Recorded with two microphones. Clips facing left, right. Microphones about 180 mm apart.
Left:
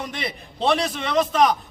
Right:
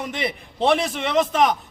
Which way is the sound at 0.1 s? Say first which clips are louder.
Right 4 dB; 20° right (ahead or behind).